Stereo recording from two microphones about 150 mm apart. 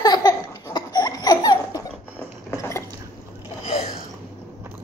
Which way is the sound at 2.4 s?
20° left (ahead or behind).